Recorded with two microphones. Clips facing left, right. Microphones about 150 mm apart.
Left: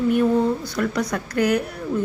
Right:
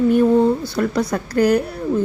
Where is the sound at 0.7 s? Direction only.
30° right (ahead or behind).